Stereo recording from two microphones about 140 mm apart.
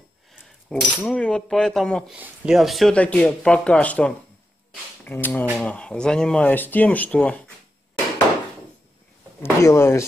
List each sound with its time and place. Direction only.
0.3 s cutlery: 5° left (ahead or behind)
2.1 s speech: 10° right (ahead or behind); by 7.4 s 10° left (ahead or behind)
9.4 s speech: 20° left (ahead or behind)